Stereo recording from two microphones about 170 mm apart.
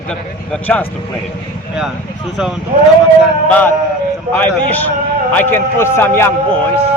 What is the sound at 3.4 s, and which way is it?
A man's voice, 10° left (ahead or behind).